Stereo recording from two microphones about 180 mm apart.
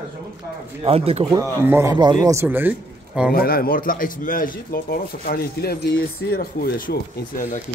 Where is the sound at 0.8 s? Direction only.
35° right (ahead or behind).